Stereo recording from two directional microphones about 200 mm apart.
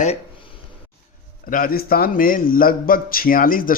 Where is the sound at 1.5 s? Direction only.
45° left (ahead or behind).